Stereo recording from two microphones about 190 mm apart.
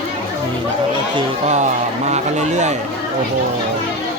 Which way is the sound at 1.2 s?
35° right (ahead or behind).